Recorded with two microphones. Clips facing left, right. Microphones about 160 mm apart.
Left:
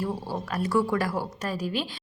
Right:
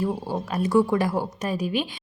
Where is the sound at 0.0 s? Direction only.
20° right (ahead or behind).